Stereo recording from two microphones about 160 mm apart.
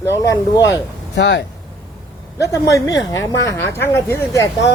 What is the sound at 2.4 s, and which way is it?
A woman's voice, 20° left (ahead or behind).